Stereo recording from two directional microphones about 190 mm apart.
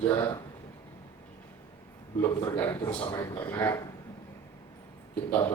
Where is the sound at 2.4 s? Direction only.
15° left (ahead or behind).